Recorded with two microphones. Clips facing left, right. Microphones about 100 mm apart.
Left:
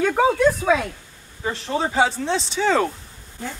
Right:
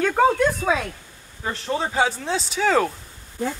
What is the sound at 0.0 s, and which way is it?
Speech, 5° left (ahead or behind).